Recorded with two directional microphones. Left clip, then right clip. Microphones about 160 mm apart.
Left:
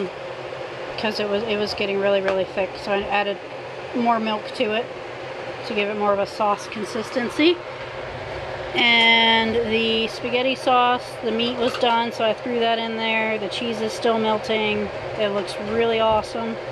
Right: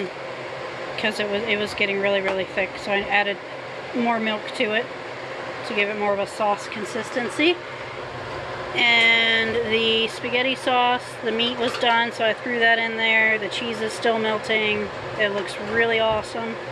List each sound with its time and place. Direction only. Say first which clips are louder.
1.0 s speech: left 1 dB; 10° left (ahead or behind)
8.7 s speech: left 1 dB; 25° left (ahead or behind)
9.7 s speech: right 1 dB; 10° left (ahead or behind)